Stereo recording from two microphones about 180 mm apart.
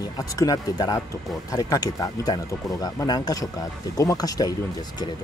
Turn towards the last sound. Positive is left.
turn(degrees=20)  # may be behind; listen again after turning